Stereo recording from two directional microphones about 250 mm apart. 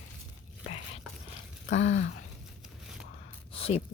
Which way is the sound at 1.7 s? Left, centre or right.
Left.